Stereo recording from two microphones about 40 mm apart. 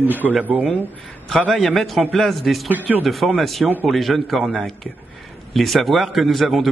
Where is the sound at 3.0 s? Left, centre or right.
Centre.